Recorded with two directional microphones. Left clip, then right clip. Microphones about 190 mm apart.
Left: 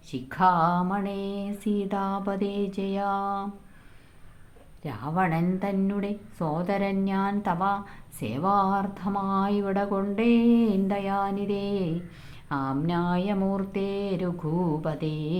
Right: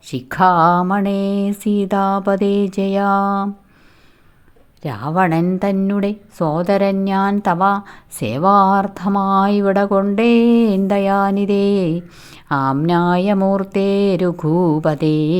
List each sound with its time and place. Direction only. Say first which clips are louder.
0.1 s speech: right 9 dB; 60° right (ahead or behind)
4.8 s a woman's voice: right 10 dB; 50° right (ahead or behind)